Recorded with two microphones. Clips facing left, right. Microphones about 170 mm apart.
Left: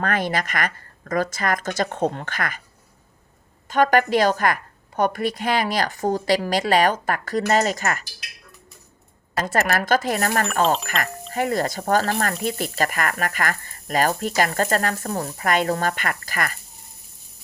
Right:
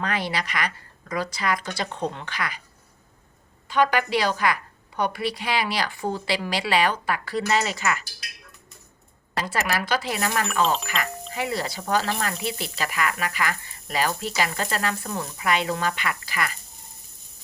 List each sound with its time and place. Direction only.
0.0 s speech: 50° left (ahead or behind)
3.7 s speech: 45° left (ahead or behind)
9.3 s speech: 45° left (ahead or behind)